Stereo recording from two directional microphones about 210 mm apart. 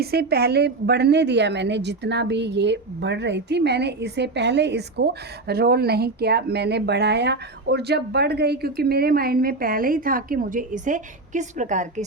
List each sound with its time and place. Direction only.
0.0 s a woman's voice: 50° right (ahead or behind)